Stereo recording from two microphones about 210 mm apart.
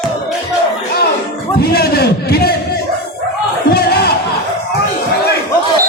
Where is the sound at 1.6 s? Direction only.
50° left (ahead or behind).